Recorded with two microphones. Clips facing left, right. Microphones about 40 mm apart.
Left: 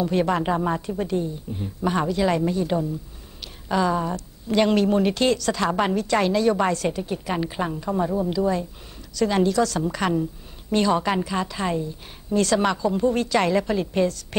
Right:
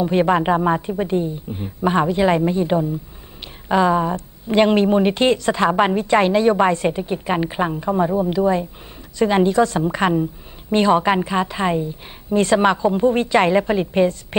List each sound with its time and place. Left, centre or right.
0.0 s a woman's voice: right